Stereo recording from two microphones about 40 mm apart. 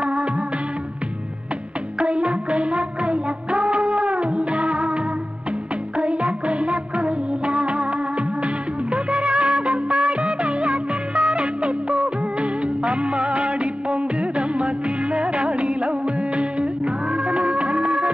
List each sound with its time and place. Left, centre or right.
0.0 s music: right
2.0 s music: right
8.9 s music of bollywood: right